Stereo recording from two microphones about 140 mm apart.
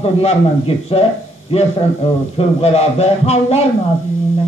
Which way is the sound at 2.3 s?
45° left (ahead or behind).